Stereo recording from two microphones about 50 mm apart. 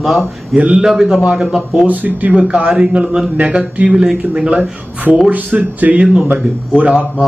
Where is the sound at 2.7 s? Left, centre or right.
Right.